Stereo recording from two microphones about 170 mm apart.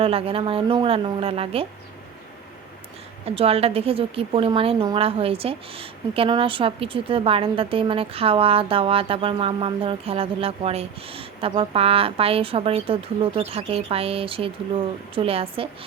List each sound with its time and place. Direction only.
0.0 s a woman's voice: 35° right (ahead or behind)
3.2 s a woman's voice: 35° right (ahead or behind)